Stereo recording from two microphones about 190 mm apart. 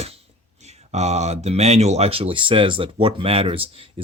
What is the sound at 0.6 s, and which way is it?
Speech, 35° right (ahead or behind).